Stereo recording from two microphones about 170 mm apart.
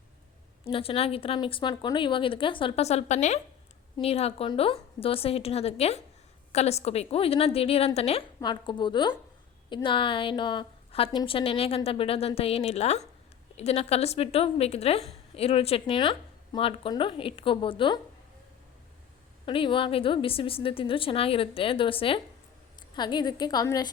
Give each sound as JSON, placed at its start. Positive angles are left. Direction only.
{"t": 0.6, "sound": "a woman's voice", "side_deg": 35}
{"t": 19.5, "sound": "a woman's voice", "side_deg": 30}